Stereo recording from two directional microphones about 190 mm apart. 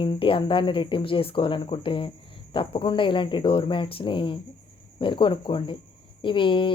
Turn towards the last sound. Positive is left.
turn(degrees=25)  # may be behind; listen again after turning